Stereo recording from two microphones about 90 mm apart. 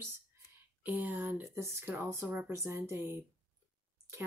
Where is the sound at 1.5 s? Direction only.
30° right (ahead or behind).